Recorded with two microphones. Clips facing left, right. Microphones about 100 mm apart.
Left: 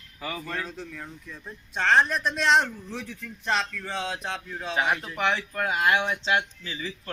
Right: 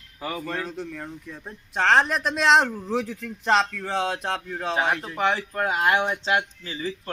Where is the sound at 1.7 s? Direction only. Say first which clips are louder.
Right 2 dB; 90° right; by 4.7 s 55° right (ahead or behind).